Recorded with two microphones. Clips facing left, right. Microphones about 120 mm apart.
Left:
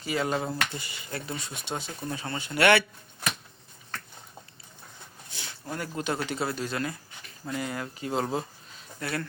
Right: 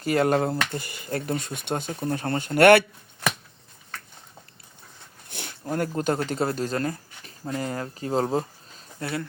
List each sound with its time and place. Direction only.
0.0 s speech: 55° right (ahead or behind)
5.3 s a sound: 55° right (ahead or behind)
5.9 s speech: 40° right (ahead or behind)
9.0 s speech: 25° right (ahead or behind)